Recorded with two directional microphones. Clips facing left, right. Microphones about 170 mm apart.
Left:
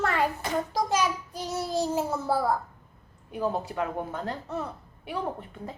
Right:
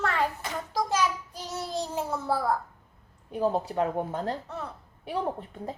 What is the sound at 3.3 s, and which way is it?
A woman's voice, 30° right (ahead or behind).